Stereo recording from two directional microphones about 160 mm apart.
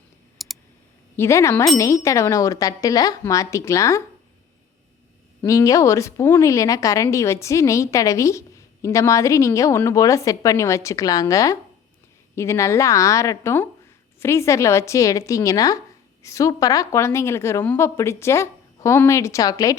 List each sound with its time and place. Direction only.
0.4 s clicking: centre (ahead or behind)
1.1 s a woman's voice: 15° left (ahead or behind)
5.5 s a woman's voice: 20° left (ahead or behind)